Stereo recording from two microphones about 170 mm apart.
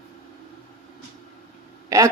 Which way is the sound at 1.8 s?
20° right (ahead or behind).